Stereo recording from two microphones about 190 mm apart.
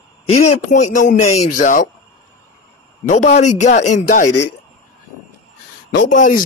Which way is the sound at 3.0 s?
40° left (ahead or behind).